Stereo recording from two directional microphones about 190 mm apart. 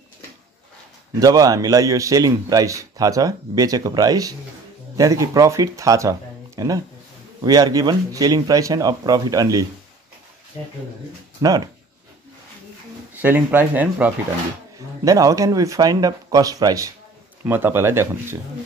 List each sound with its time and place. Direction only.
1.2 s a man's voice: 20° right (ahead or behind)
11.4 s a man's voice: 20° right (ahead or behind)
13.2 s a man's voice: 10° right (ahead or behind)